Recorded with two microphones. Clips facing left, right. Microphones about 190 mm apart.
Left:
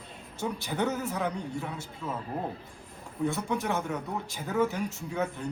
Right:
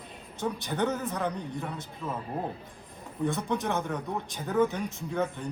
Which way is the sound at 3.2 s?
5° left (ahead or behind).